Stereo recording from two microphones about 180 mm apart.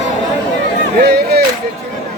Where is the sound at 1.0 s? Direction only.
65° right (ahead or behind).